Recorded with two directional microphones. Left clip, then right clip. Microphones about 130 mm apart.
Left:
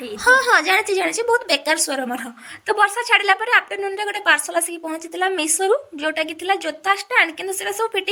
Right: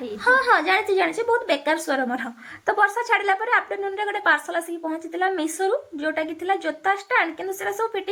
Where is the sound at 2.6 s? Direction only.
40° left (ahead or behind).